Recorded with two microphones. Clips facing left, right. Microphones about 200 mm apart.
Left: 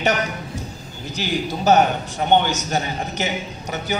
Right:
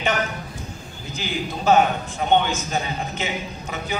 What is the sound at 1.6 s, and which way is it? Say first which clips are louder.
Speech: left 1 dB; 40° left (ahead or behind).